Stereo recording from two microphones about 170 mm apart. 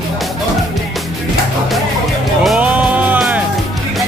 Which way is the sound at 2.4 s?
5° right (ahead or behind).